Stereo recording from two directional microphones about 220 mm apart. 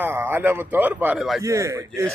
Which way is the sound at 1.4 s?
15° right (ahead or behind).